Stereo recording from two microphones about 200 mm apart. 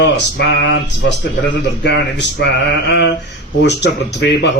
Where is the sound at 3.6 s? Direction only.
60° left (ahead or behind).